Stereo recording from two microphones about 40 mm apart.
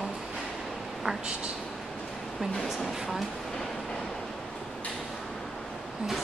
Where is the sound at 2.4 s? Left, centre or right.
Centre.